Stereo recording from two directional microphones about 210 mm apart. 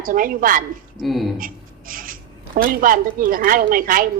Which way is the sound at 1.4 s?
40° right (ahead or behind).